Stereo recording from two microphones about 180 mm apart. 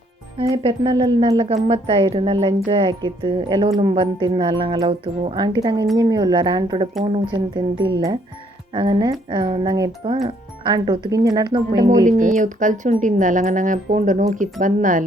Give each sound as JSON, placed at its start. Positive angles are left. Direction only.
{"t": 0.5, "sound": "speech", "side_deg": -30}
{"t": 11.9, "sound": "speech", "side_deg": -45}